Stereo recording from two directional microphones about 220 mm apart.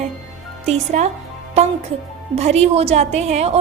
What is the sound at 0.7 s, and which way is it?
Speech, 30° right (ahead or behind).